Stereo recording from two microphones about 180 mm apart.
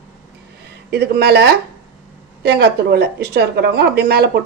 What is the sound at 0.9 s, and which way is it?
A woman's voice, 65° right (ahead or behind).